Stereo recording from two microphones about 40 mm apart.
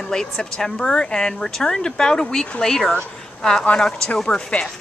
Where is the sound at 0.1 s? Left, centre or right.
Centre.